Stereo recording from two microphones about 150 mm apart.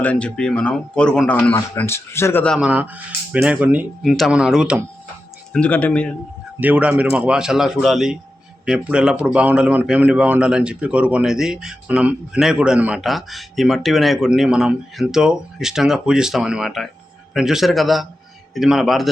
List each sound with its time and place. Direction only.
0.0 s a man's voice: 10° left (ahead or behind)
1.5 s a man's voice: 15° left (ahead or behind)
2.6 s speech: 10° right (ahead or behind)
5.5 s a man's voice: 10° left (ahead or behind)
6.6 s speech: 10° right (ahead or behind)